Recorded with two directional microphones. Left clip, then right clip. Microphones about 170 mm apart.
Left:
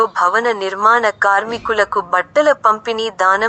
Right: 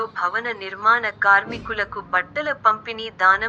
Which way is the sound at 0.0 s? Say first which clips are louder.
Left 10 dB; 45° left (ahead or behind).